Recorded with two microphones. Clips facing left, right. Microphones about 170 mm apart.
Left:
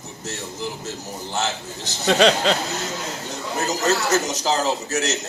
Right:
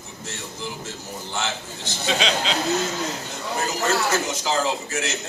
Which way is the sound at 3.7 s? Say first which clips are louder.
Left 3 dB; 40° left (ahead or behind).